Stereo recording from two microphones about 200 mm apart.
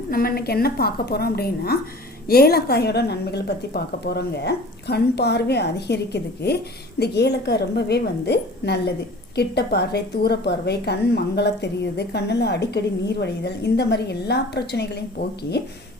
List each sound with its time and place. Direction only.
0.1 s a woman's voice: 45° left (ahead or behind)